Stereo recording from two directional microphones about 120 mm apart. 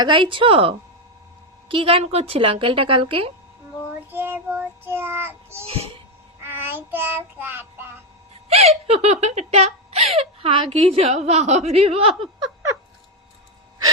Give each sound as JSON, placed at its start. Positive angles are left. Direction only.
{"t": 0.0, "sound": "a woman's voice", "side_deg": -45}
{"t": 4.1, "sound": "child singing", "side_deg": -15}
{"t": 5.6, "sound": "speech", "side_deg": -55}
{"t": 6.4, "sound": "child singing", "side_deg": -20}
{"t": 8.4, "sound": "speech", "side_deg": -60}
{"t": 10.9, "sound": "a woman's voice", "side_deg": -60}